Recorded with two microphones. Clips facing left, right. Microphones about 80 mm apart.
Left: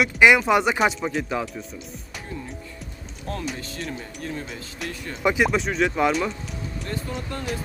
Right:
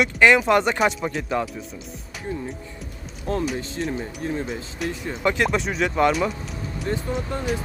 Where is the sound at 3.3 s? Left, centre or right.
Right.